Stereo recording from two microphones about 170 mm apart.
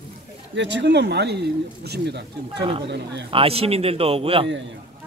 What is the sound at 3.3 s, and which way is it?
A man's voice, 35° right (ahead or behind).